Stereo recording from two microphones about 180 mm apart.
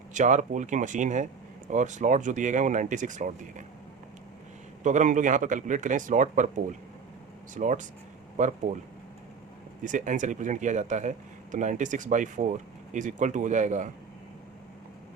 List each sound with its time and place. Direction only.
0.1 s speech: 45° right (ahead or behind)
4.8 s speech: 40° right (ahead or behind)
9.8 s speech: 45° right (ahead or behind)